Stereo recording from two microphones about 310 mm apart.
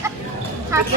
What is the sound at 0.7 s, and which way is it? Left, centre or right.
Speech, centre.